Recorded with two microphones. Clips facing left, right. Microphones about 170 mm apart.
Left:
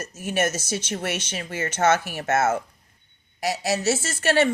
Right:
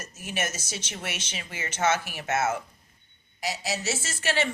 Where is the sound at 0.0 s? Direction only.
50° left (ahead or behind).